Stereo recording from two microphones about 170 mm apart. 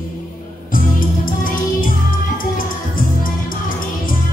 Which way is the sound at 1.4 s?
55° left (ahead or behind).